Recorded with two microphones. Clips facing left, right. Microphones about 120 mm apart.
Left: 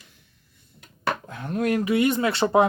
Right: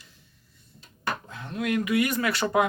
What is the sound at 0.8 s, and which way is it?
Speech, 55° left (ahead or behind).